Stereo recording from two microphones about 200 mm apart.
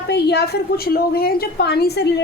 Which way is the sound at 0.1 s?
55° left (ahead or behind).